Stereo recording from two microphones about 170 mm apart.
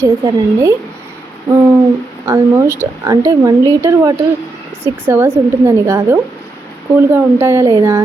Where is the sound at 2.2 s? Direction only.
15° right (ahead or behind).